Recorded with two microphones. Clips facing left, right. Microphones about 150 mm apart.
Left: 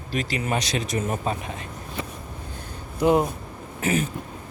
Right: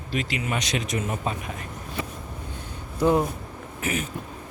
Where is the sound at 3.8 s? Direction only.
30° left (ahead or behind).